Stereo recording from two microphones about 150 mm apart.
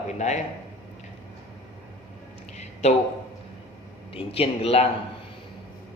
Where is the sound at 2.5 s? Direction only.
50° left (ahead or behind).